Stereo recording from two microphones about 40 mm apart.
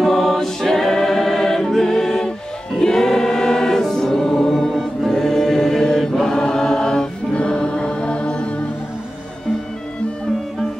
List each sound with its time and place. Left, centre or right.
0.0 s choir: centre
1.8 s music: centre
2.8 s choir: centre